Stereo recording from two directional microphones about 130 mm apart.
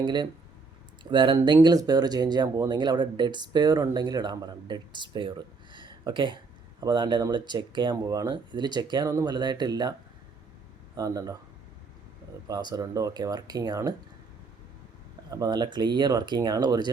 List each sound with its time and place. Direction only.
0.0 s speech: 35° right (ahead or behind)
5.7 s a sound: 35° right (ahead or behind)
6.7 s speech: 35° right (ahead or behind)
10.9 s speech: 25° right (ahead or behind)
12.5 s speech: 30° right (ahead or behind)
15.3 s speech: 30° right (ahead or behind)